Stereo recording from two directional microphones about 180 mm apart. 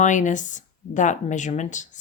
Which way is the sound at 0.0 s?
45° left (ahead or behind).